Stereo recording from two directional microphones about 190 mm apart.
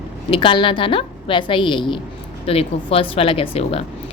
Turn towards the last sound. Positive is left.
turn(degrees=30)  # may be behind; listen again after turning